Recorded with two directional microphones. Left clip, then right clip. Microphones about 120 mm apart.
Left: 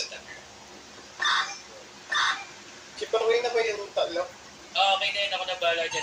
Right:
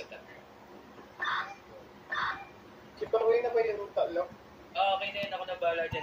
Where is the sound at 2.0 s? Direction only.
10° left (ahead or behind).